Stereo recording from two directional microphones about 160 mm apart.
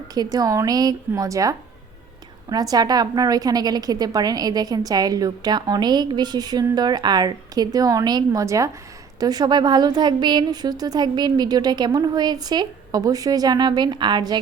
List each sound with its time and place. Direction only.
0.1 s a woman's voice: 25° right (ahead or behind)